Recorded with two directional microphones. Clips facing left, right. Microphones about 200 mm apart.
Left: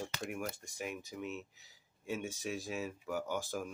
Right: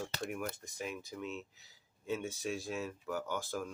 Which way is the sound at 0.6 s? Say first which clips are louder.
Even; 15° left (ahead or behind).